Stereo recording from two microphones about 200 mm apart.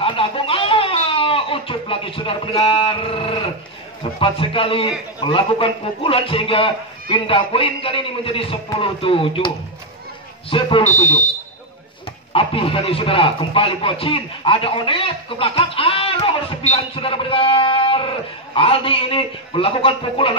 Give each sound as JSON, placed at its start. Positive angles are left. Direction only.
{"t": 0.0, "sound": "a sound", "side_deg": 25}
{"t": 4.0, "sound": "a man's voice", "side_deg": 25}
{"t": 10.5, "sound": "a man's voice", "side_deg": 30}
{"t": 12.3, "sound": "a man's voice", "side_deg": 25}